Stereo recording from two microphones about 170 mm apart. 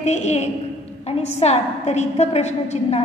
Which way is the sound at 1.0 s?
40° left (ahead or behind).